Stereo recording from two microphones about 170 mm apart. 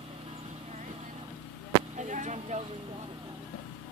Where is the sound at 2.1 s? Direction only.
45° right (ahead or behind).